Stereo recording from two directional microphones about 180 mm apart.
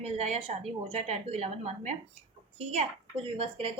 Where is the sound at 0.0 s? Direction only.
35° right (ahead or behind).